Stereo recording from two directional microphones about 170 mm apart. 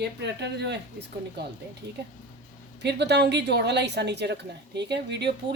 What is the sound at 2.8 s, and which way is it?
Speech, 80° right.